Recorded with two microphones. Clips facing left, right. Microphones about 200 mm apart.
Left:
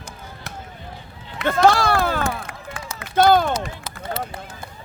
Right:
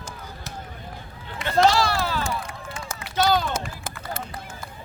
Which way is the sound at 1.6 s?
55° left (ahead or behind).